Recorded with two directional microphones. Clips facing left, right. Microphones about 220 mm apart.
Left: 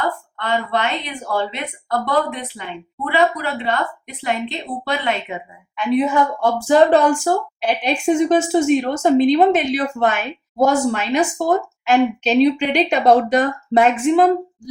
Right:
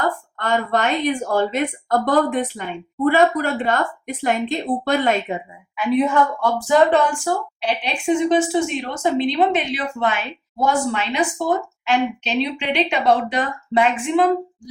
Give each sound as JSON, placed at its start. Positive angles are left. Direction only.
{"t": 0.3, "sound": "a woman's voice", "side_deg": -45}
{"t": 5.7, "sound": "a woman's voice", "side_deg": -5}
{"t": 6.4, "sound": "a woman's voice", "side_deg": 35}